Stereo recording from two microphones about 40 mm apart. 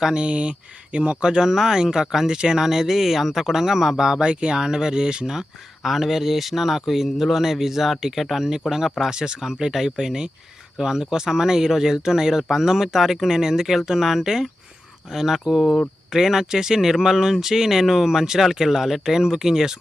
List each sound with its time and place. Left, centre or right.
0.0 s speech: right
1.5 s speech: centre
4.2 s speech: right